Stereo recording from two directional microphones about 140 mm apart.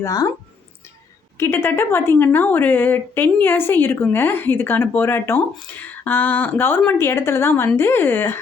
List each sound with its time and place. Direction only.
0.0 s speech: 25° left (ahead or behind)
1.4 s a woman's voice: 15° left (ahead or behind)